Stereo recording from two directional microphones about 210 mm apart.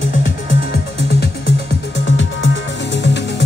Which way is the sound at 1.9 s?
60° left (ahead or behind).